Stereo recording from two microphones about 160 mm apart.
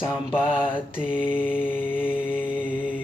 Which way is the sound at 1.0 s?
5° right (ahead or behind).